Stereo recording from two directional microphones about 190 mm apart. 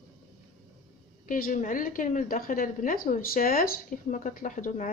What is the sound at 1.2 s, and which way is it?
A woman's voice, 45° left (ahead or behind).